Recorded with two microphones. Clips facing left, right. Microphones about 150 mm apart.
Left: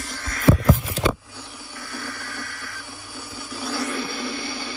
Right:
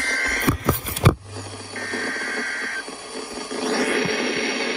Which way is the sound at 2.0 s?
50° right (ahead or behind).